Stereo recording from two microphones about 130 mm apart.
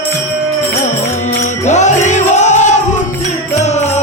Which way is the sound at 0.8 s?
65° left (ahead or behind).